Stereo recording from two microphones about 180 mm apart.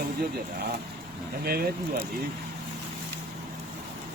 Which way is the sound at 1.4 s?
55° right (ahead or behind).